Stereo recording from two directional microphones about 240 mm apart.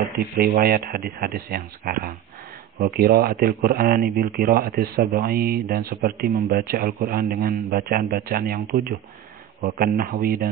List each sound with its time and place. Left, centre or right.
0.4 s speech: right